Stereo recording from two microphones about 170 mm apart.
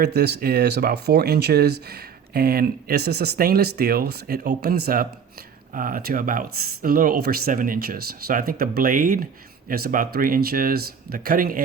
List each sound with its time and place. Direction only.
0.0 s speech: 70° right (ahead or behind)